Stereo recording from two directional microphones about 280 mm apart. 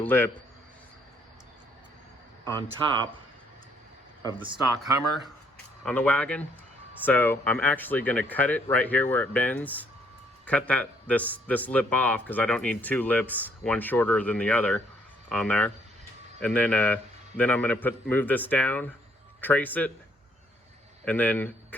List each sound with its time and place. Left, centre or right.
0.0 s speech: centre
4.2 s speech: centre
5.8 s a man's voice: centre
21.0 s speech: centre